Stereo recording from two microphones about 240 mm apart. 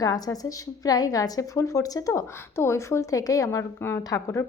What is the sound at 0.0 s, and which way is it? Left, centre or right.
A woman's voice, centre.